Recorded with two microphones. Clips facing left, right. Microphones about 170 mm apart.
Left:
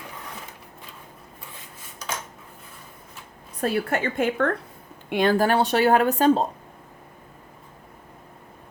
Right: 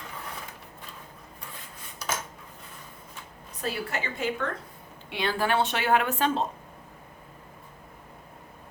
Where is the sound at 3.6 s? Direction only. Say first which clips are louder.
Left 8 dB; 55° left (ahead or behind); by 6.4 s 40° left (ahead or behind).